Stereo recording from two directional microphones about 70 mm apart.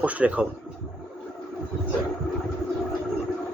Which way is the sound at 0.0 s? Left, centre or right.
Right.